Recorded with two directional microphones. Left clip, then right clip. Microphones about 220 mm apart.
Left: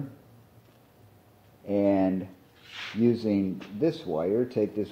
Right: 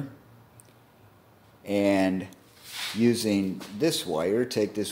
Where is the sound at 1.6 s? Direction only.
40° right (ahead or behind).